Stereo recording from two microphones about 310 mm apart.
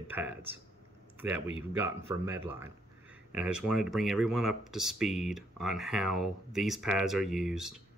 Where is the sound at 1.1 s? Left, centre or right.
Centre.